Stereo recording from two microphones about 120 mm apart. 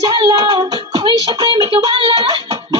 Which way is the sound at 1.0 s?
40° right (ahead or behind).